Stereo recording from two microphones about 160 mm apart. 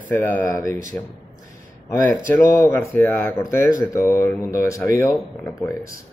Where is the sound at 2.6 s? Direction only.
15° left (ahead or behind).